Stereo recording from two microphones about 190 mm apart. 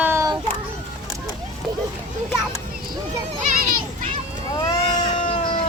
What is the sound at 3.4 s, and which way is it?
Children playing, 45° right (ahead or behind).